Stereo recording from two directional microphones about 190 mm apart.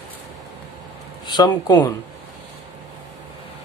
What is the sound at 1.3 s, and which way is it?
Speech, 20° left (ahead or behind).